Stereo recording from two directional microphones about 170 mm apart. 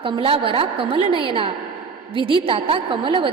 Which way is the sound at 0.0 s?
30° right (ahead or behind).